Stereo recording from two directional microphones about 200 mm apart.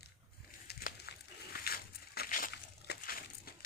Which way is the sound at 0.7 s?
55° left (ahead or behind).